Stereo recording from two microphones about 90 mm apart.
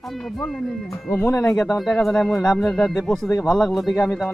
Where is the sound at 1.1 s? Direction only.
25° left (ahead or behind).